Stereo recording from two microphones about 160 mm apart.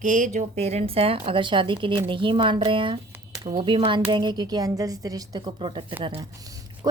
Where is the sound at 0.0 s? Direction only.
50° right (ahead or behind).